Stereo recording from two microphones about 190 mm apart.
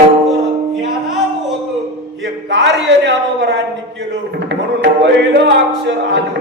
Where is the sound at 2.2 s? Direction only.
70° right (ahead or behind).